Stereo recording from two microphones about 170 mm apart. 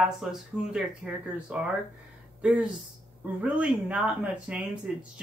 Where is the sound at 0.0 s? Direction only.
Centre (ahead or behind).